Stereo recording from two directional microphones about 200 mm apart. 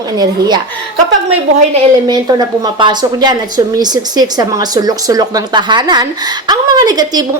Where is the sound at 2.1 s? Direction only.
20° right (ahead or behind).